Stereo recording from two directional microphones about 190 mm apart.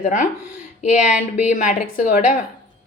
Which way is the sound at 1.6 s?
40° left (ahead or behind).